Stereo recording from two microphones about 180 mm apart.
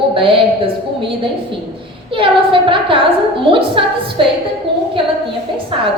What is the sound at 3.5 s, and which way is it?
Speech, 30° right (ahead or behind).